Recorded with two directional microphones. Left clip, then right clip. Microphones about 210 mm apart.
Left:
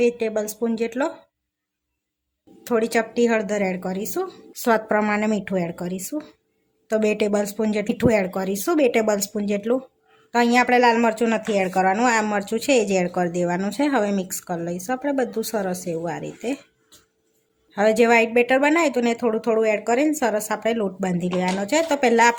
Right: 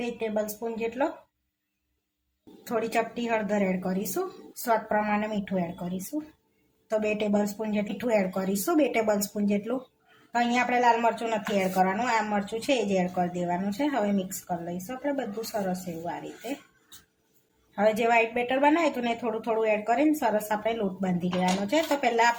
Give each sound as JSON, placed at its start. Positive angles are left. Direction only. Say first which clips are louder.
{"t": 0.0, "sound": "a woman's voice", "louder": "left 9 dB", "side_deg": 50}
{"t": 2.6, "sound": "a woman's voice", "louder": "left 6 dB", "side_deg": 45}
{"t": 6.8, "sound": "speech", "louder": "left 6 dB", "side_deg": 40}
{"t": 17.7, "sound": "a woman's voice", "louder": "left 6 dB", "side_deg": 45}